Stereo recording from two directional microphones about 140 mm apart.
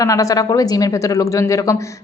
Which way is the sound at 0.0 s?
25° left (ahead or behind).